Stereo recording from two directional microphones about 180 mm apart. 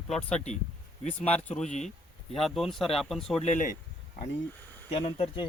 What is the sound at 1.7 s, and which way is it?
Speech, 40° left (ahead or behind).